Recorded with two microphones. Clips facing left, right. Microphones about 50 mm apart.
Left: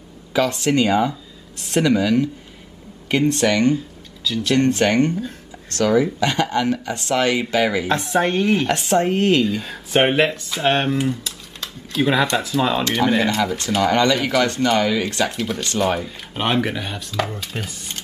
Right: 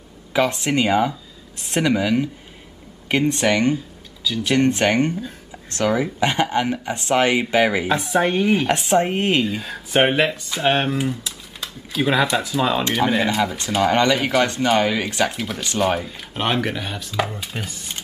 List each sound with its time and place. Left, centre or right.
0.3 s speech: right
4.2 s speech: centre
4.5 s speech: centre
8.0 s speech: centre
8.6 s speech: centre
9.6 s speech: centre
15.2 s speech: centre